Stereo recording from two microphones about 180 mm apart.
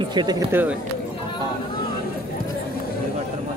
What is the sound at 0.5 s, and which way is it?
Speech, 10° right (ahead or behind).